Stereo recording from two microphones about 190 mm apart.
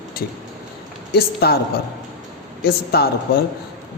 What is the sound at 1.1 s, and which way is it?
Speech, 55° left (ahead or behind).